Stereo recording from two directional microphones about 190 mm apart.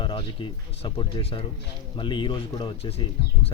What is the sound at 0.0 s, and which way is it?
Speech, 25° left (ahead or behind).